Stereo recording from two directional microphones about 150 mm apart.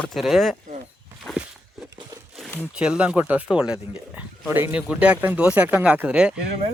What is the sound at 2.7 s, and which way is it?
Speech, 5° right (ahead or behind).